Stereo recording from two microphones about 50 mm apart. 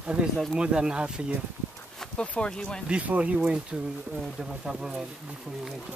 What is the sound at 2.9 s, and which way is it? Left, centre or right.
Speech, right.